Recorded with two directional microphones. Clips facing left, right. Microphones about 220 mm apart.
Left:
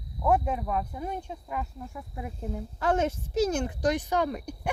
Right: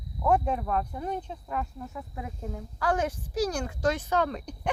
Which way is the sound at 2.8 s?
25° left (ahead or behind).